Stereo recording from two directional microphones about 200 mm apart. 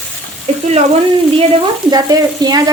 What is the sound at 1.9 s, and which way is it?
Speech, 20° right (ahead or behind).